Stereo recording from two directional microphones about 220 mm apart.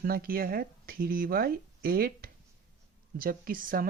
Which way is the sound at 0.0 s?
40° right (ahead or behind).